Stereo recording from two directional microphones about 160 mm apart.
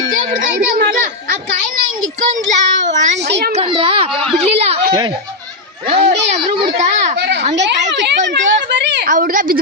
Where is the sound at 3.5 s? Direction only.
35° right (ahead or behind).